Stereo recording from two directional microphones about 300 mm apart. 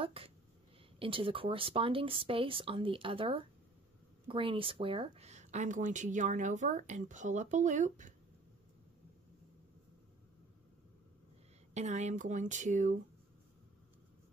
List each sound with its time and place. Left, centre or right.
0.0 s speech: centre
11.7 s speech: right